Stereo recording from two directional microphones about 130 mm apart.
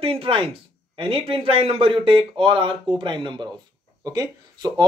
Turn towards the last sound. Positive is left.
turn(degrees=-30)  # may be behind; listen again after turning